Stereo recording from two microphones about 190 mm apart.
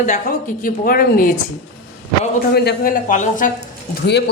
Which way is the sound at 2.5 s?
60° left (ahead or behind).